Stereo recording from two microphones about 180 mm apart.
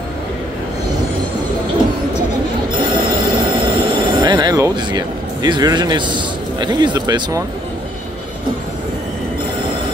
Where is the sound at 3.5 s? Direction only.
30° right (ahead or behind).